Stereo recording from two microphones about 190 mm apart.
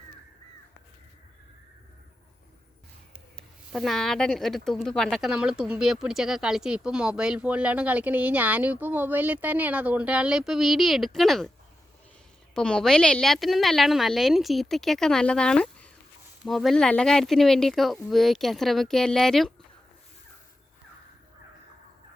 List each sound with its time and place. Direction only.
3.7 s a woman's voice: centre (ahead or behind)
12.5 s a woman's voice: 5° left (ahead or behind)